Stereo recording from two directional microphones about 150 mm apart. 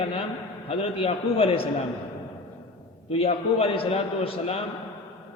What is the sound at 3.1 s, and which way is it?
A man's voice, 40° left (ahead or behind).